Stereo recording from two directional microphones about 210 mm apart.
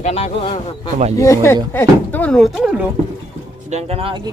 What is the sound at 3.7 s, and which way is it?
Speech, 30° right (ahead or behind).